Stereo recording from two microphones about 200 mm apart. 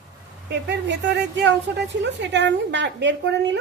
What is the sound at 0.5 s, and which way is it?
Speech, 60° right (ahead or behind).